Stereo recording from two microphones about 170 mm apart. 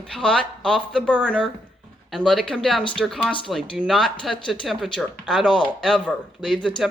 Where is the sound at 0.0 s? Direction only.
5° left (ahead or behind).